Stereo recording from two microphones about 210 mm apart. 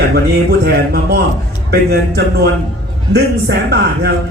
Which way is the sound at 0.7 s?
50° right (ahead or behind).